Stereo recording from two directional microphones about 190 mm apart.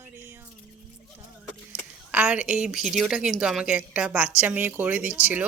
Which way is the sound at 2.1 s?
5° right (ahead or behind).